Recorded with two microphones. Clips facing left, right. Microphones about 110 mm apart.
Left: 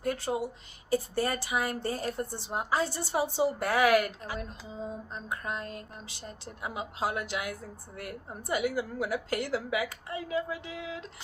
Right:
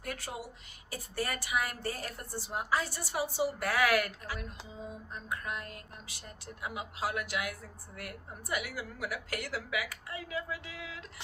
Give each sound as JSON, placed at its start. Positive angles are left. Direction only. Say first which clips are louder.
{"t": 0.0, "sound": "a woman's voice", "louder": "left 10 dB", "side_deg": 30}